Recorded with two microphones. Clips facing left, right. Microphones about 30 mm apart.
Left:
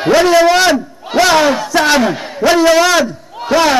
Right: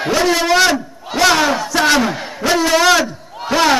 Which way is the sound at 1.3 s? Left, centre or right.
Centre.